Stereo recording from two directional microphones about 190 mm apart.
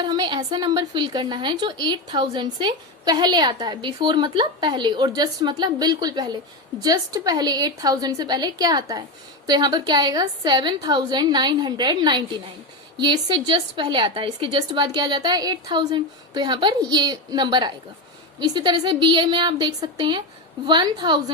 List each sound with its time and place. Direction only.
0.0 s a woman's voice: 25° right (ahead or behind)